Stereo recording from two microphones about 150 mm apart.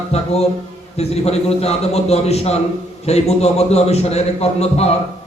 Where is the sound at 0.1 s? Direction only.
45° left (ahead or behind).